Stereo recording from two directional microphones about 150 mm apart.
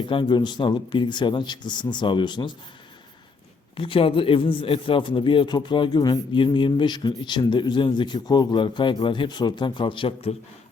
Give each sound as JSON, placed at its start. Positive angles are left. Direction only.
{"t": 0.1, "sound": "a man's voice", "side_deg": 30}
{"t": 3.8, "sound": "a man's voice", "side_deg": 35}